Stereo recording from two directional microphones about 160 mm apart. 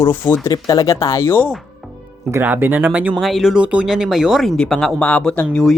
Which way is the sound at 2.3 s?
10° right (ahead or behind).